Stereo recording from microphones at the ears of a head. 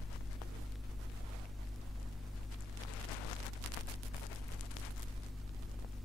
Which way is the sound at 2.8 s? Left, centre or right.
Left.